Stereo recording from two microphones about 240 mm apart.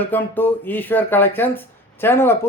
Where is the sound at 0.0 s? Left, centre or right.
Centre.